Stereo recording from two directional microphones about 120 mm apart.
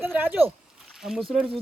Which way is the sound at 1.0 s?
5° right (ahead or behind).